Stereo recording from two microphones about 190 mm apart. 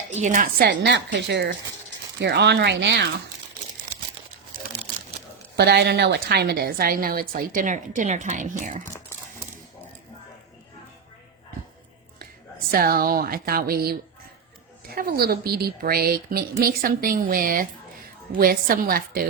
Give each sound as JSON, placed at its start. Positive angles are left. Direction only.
{"t": 0.2, "sound": "a woman's voice", "side_deg": -45}
{"t": 0.7, "sound": "speech", "side_deg": -65}
{"t": 5.5, "sound": "a woman's voice", "side_deg": -60}
{"t": 12.7, "sound": "a woman's voice", "side_deg": -50}